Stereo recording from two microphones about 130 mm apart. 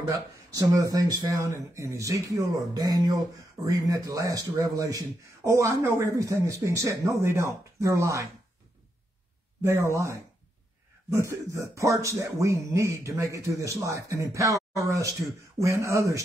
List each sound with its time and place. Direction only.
0.0 s a man's voice: 25° right (ahead or behind)
9.6 s a man's voice: 20° right (ahead or behind)